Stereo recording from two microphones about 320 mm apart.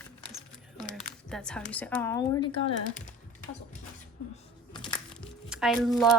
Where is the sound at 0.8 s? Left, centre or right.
Centre.